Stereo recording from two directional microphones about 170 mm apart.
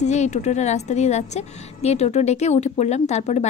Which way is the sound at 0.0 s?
40° left (ahead or behind).